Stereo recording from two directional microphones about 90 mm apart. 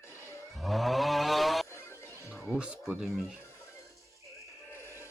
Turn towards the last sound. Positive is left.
turn(degrees=30)  # may be behind; listen again after turning